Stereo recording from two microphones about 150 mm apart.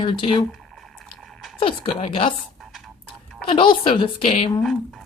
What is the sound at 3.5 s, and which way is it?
Speech, 35° left (ahead or behind).